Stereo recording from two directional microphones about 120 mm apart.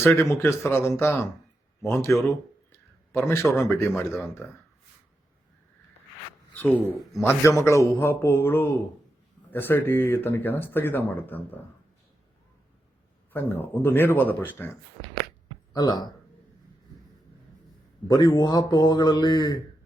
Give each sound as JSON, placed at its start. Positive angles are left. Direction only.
{"t": 0.0, "sound": "a man's voice", "side_deg": 20}
{"t": 7.2, "sound": "a man's voice", "side_deg": 25}
{"t": 13.3, "sound": "speech", "side_deg": 15}
{"t": 15.7, "sound": "a man's voice", "side_deg": 35}
{"t": 18.1, "sound": "a man's voice", "side_deg": 35}